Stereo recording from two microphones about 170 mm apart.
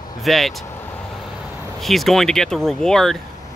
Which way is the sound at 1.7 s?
Centre (ahead or behind).